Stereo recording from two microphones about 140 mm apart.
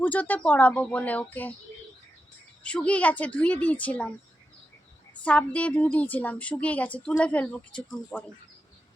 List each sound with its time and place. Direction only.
0.0 s a woman's voice: 10° left (ahead or behind)
2.6 s a woman's voice: 10° left (ahead or behind)
5.2 s a woman's voice: 10° left (ahead or behind)